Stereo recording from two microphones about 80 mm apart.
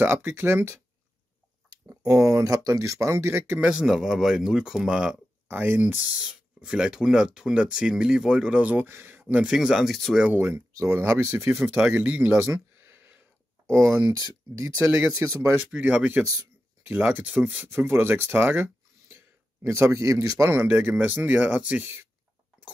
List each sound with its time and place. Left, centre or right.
0.0 s speech: right
2.0 s speech: right
3.8 s speech: centre
5.5 s speech: right
9.5 s speech: centre
10.1 s speech: centre
10.4 s speech: right
11.9 s speech: right
12.7 s a sound: right
13.8 s speech: right
15.7 s speech: centre; by 20.5 s right
20.5 s speech: right